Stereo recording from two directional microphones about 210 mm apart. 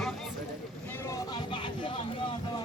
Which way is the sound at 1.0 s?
15° left (ahead or behind).